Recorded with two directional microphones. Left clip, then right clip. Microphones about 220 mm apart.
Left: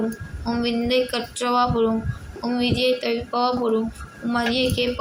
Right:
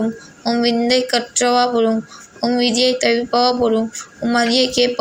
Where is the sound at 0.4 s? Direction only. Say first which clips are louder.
Right 7 dB; 25° right (ahead or behind).